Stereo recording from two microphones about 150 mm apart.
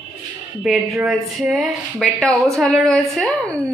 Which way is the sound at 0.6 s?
Centre (ahead or behind).